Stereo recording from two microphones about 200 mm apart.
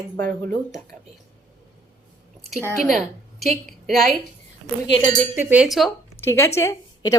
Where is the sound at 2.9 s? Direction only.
Centre (ahead or behind).